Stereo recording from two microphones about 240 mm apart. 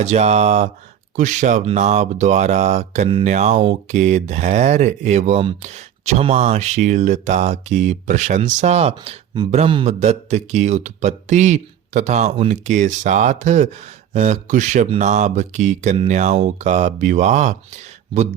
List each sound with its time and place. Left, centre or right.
0.0 s speech: right